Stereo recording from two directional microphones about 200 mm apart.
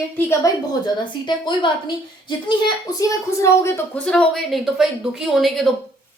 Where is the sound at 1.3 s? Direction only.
25° left (ahead or behind).